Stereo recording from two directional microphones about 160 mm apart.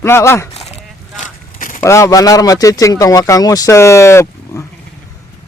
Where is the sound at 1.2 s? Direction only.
55° left (ahead or behind).